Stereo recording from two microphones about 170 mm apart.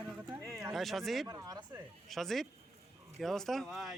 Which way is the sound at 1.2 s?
20° right (ahead or behind).